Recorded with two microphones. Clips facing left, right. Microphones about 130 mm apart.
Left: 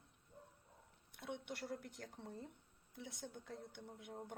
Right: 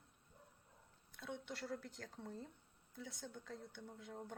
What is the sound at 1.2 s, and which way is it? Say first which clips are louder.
Speech: left 1 dB; 25° left (ahead or behind).